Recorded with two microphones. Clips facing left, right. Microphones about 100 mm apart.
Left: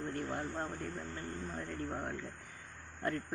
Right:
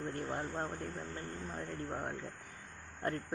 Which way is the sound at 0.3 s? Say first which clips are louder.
Even; 25° right (ahead or behind).